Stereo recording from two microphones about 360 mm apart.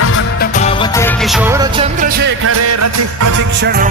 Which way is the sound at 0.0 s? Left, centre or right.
Left.